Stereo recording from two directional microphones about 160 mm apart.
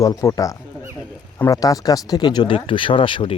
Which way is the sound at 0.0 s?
20° left (ahead or behind).